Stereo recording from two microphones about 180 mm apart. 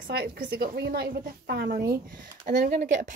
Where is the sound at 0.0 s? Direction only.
60° right (ahead or behind).